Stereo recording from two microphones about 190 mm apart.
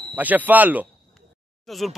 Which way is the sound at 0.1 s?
10° right (ahead or behind).